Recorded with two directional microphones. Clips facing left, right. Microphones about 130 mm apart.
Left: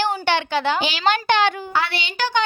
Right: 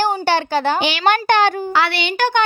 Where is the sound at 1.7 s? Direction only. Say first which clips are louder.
Right 5 dB; 75° right (ahead or behind); by 2.4 s 55° right (ahead or behind).